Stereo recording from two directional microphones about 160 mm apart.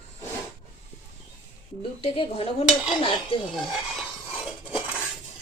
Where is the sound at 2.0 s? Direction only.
35° left (ahead or behind).